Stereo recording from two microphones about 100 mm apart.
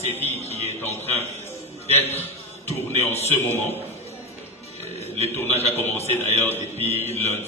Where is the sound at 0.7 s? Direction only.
25° left (ahead or behind).